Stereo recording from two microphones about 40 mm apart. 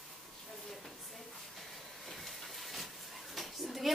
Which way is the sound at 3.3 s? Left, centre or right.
Centre.